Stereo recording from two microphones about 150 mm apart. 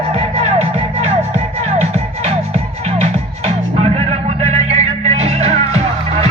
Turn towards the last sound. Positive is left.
turn(degrees=-45)  # may be behind; listen again after turning